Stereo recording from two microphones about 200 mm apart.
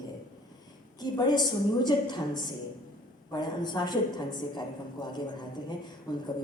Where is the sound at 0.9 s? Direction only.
20° left (ahead or behind).